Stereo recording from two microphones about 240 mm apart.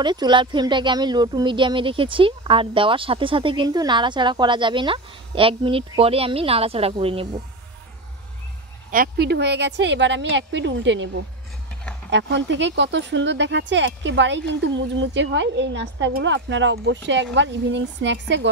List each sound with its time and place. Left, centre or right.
0.0 s speech: centre
8.9 s speech: right
12.1 s speech: right